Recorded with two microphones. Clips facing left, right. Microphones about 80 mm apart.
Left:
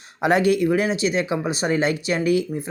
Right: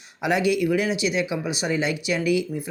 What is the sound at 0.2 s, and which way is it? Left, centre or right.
Speech, left.